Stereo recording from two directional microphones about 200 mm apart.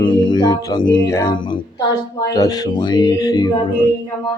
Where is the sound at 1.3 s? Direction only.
25° left (ahead or behind).